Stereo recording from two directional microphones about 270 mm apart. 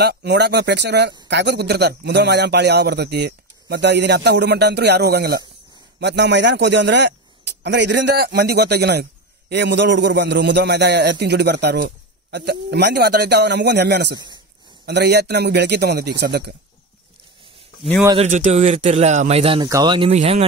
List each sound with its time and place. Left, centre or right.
0.0 s a man's voice: right
14.1 s speech: centre
14.9 s a man's voice: right
18.0 s speech: right